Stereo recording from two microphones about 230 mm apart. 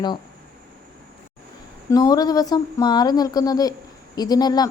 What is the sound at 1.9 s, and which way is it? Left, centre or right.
Speech, centre.